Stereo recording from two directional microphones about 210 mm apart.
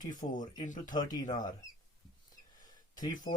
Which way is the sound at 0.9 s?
20° left (ahead or behind).